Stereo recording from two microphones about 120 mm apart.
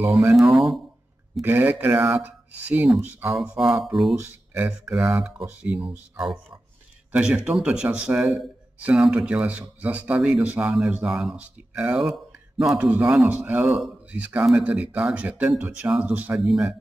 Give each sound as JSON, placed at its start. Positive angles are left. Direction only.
{"t": 0.3, "sound": "speech", "side_deg": 0}
{"t": 1.4, "sound": "speech", "side_deg": -15}
{"t": 4.2, "sound": "speech", "side_deg": -10}